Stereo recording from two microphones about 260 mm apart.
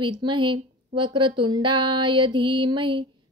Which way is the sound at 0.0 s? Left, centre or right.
Centre.